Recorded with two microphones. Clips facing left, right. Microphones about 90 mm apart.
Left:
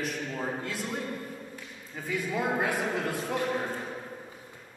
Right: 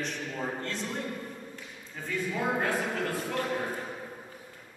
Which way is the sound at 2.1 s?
10° left (ahead or behind).